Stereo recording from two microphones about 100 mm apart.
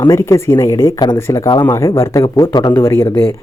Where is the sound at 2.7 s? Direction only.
25° left (ahead or behind).